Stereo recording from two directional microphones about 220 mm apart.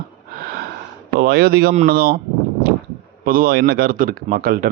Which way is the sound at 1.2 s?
45° right (ahead or behind).